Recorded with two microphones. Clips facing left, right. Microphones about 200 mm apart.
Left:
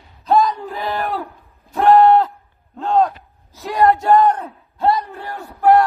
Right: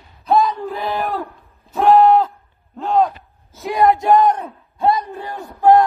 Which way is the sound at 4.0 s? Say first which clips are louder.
Even; 15° right (ahead or behind).